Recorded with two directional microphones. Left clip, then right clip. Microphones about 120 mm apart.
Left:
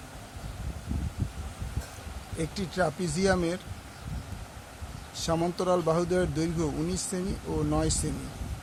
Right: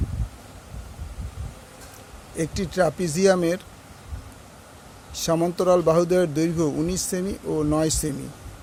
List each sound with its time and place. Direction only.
2.4 s a man's voice: 60° right (ahead or behind)
5.1 s a man's voice: 55° right (ahead or behind)